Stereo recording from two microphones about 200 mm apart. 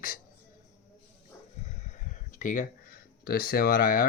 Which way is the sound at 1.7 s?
40° left (ahead or behind).